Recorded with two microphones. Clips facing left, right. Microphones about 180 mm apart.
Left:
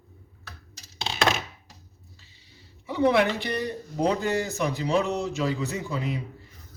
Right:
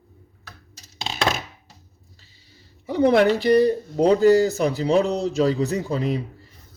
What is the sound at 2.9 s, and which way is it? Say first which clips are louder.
Speech: right 5 dB; 40° right (ahead or behind).